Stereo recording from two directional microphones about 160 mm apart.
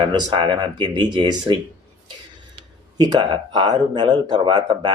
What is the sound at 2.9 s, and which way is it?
Speech, 25° right (ahead or behind).